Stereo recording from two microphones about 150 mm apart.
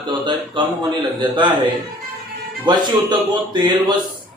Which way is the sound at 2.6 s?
30° right (ahead or behind).